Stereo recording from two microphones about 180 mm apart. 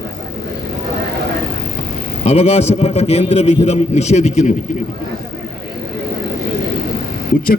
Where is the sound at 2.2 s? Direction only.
35° left (ahead or behind).